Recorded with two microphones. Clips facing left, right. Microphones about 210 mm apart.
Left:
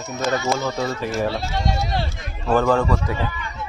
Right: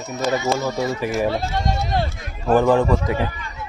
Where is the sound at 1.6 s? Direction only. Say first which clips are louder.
Even; 50° right (ahead or behind).